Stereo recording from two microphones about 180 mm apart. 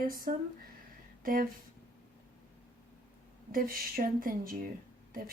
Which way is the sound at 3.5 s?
55° right (ahead or behind).